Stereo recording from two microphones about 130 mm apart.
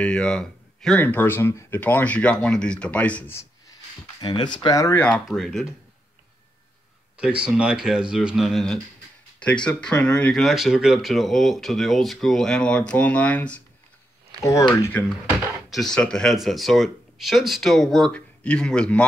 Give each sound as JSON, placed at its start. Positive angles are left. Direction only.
{"t": 0.0, "sound": "speech", "side_deg": 5}
{"t": 4.2, "sound": "speech", "side_deg": 35}
{"t": 5.0, "sound": "speech", "side_deg": 5}
{"t": 7.2, "sound": "speech", "side_deg": -5}
{"t": 14.4, "sound": "speech", "side_deg": 25}
{"t": 14.8, "sound": "speech", "side_deg": 15}